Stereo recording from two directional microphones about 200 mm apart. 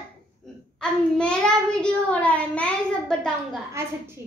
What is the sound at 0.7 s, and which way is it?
Child singing, 5° left (ahead or behind).